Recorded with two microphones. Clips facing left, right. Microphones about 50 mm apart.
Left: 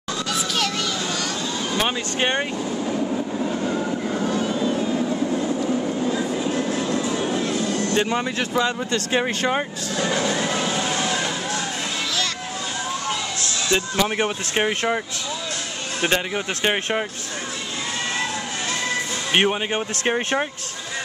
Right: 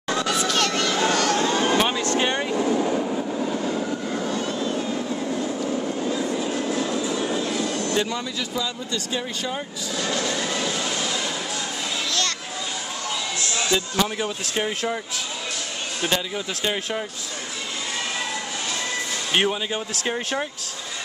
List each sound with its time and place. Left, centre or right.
0.4 s a sound: centre
1.3 s vehicle: right
1.9 s speech: left
2.5 s train: right; by 3.4 s centre
3.6 s vehicle: centre
6.9 s music: left
7.8 s speech: left
9.9 s music: left
13.7 s speech: left
16.0 s speech: left
19.3 s speech: left
19.7 s speech: left